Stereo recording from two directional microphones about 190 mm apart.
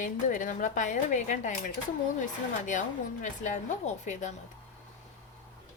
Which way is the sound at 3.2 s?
40° left (ahead or behind).